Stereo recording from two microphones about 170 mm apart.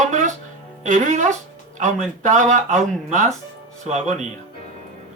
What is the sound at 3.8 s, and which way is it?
Speech, 45° right (ahead or behind).